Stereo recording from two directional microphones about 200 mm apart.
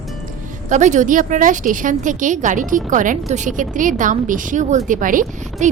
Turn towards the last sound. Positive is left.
turn(degrees=-40)  # may be behind; listen again after turning